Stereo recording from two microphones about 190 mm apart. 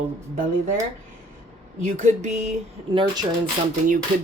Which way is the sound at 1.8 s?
40° right (ahead or behind).